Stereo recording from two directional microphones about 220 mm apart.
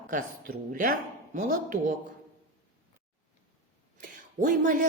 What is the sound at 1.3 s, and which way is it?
Speech, 35° right (ahead or behind).